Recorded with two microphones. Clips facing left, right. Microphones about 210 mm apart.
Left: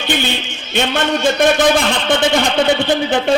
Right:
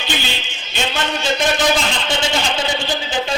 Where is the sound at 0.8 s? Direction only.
55° left (ahead or behind).